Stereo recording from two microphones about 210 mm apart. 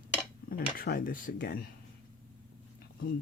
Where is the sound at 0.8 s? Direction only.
40° left (ahead or behind).